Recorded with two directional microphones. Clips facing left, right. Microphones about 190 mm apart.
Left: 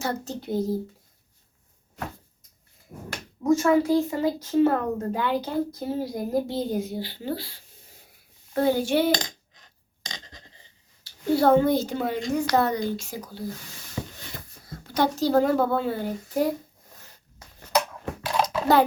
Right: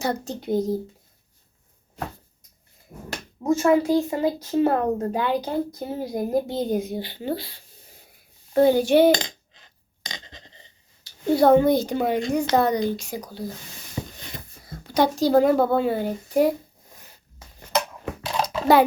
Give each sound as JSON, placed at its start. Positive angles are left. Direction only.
{"t": 0.0, "sound": "speech", "side_deg": -15}
{"t": 3.1, "sound": "a child's voice", "side_deg": -25}
{"t": 8.5, "sound": "speech", "side_deg": -15}
{"t": 11.0, "sound": "speech", "side_deg": -15}
{"t": 14.9, "sound": "speech", "side_deg": -15}
{"t": 18.4, "sound": "a sound", "side_deg": -10}